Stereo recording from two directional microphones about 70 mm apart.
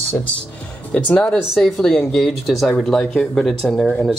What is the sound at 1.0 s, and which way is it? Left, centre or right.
Speech, left.